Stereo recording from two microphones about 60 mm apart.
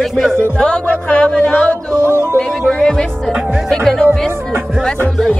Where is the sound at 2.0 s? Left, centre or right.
Left.